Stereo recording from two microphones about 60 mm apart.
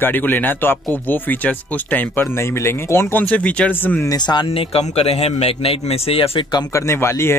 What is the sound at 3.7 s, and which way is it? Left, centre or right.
Speech, left.